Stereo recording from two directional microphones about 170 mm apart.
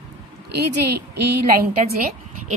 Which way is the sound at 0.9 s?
75° right (ahead or behind).